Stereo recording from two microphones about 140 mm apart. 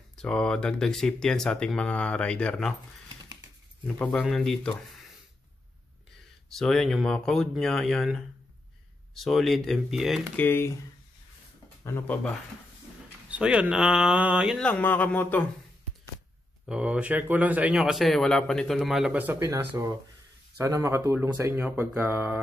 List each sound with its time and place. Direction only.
0.1 s a man's voice: 5° left (ahead or behind)
3.8 s a man's voice: 5° left (ahead or behind)
6.5 s a man's voice: 5° left (ahead or behind)
10.3 s a man's voice: 15° left (ahead or behind)
11.8 s speech: 20° left (ahead or behind)
13.3 s speech: 5° right (ahead or behind)
14.6 s a man's voice: 10° left (ahead or behind)
16.6 s a man's voice: 5° right (ahead or behind)
19.4 s speech: 20° right (ahead or behind)